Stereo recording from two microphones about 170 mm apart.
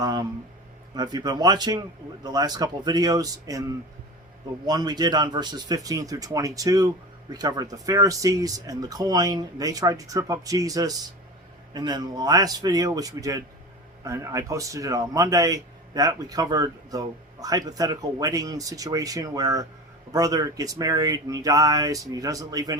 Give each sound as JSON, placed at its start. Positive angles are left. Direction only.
{"t": 0.0, "sound": "a man's voice", "side_deg": -25}